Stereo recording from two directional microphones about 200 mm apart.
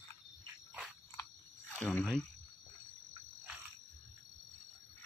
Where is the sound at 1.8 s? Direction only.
5° left (ahead or behind).